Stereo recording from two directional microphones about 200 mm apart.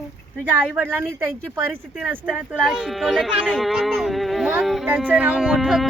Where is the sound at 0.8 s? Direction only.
10° right (ahead or behind).